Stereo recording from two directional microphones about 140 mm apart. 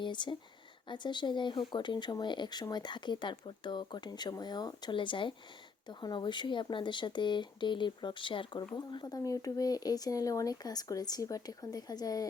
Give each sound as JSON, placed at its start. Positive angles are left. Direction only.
{"t": 0.0, "sound": "speech", "side_deg": 35}